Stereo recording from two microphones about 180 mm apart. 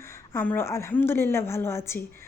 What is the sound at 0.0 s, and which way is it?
Speech, 15° left (ahead or behind).